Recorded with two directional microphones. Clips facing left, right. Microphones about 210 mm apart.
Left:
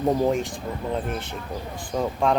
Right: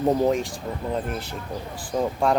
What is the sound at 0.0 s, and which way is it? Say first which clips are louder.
Speech: right 1 dB; centre (ahead or behind).